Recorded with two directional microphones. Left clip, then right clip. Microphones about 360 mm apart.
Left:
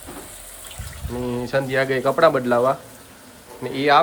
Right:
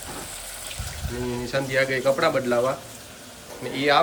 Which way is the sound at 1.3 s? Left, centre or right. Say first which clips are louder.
Left 4 dB; centre.